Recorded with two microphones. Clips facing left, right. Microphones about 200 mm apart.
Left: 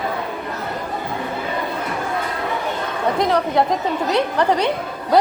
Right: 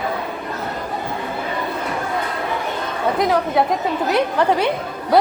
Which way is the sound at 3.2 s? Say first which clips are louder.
Even; centre (ahead or behind).